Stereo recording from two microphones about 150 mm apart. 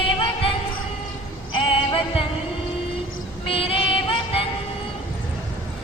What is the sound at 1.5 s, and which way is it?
Music, 35° left (ahead or behind).